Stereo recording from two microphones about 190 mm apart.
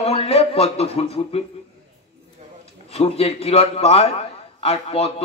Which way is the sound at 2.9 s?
30° left (ahead or behind).